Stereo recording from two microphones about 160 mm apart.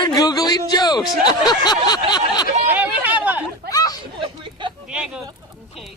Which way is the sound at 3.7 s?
25° left (ahead or behind).